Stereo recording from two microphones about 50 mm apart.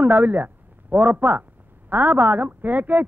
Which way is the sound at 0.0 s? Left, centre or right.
Right.